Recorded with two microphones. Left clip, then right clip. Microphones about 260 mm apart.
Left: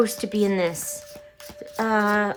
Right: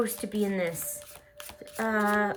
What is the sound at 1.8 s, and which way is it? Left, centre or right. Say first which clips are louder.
Speech: left 5 dB; centre.